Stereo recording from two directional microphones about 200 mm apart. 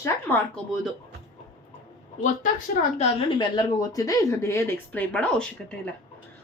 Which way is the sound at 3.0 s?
25° left (ahead or behind).